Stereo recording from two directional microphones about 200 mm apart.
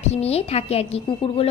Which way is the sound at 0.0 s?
30° left (ahead or behind).